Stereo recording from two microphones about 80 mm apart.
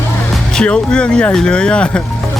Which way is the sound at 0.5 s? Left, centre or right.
Centre.